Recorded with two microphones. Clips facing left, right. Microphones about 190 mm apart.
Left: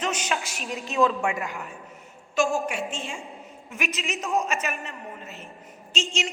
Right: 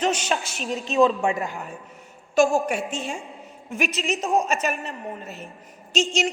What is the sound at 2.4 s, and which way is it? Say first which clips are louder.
A man's voice: right 5 dB; 40° right (ahead or behind).